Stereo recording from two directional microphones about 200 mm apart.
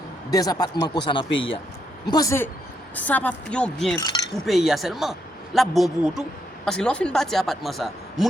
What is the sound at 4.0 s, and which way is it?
Speech, 20° left (ahead or behind).